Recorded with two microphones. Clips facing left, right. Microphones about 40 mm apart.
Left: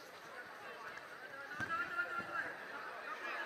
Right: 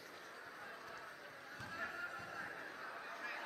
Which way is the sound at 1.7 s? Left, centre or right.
Left.